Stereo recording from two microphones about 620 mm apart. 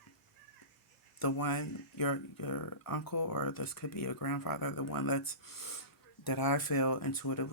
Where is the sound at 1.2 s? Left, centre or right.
Left.